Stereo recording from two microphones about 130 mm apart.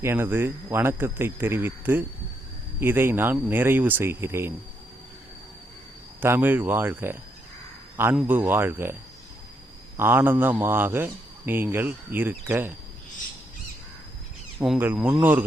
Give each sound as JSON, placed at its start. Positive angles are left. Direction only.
{"t": 0.0, "sound": "speech", "side_deg": -20}
{"t": 6.2, "sound": "speech", "side_deg": -15}
{"t": 8.3, "sound": "speech", "side_deg": -15}
{"t": 10.0, "sound": "speech", "side_deg": -15}
{"t": 14.6, "sound": "a man's voice", "side_deg": -10}